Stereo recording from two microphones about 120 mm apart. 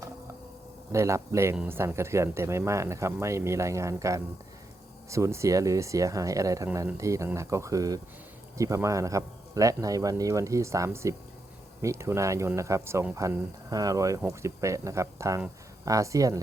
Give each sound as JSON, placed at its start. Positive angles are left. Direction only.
{"t": 0.9, "sound": "speech", "side_deg": -25}